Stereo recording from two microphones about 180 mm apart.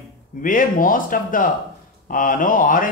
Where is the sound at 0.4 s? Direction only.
50° left (ahead or behind).